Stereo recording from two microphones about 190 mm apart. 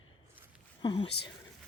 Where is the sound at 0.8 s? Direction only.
25° left (ahead or behind).